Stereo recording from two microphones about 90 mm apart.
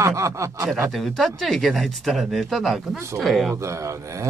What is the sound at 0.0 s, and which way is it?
Speech, 35° right (ahead or behind).